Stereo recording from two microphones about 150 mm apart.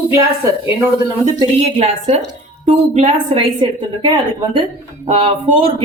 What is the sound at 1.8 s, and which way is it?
A woman's voice, 45° right (ahead or behind).